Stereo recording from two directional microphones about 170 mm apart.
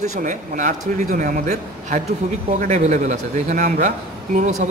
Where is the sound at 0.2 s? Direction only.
50° right (ahead or behind).